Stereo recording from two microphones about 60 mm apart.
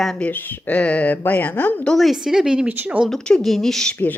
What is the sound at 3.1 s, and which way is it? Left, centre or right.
Speech, centre.